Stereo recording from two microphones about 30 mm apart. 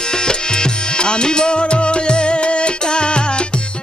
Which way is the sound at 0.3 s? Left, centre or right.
Left.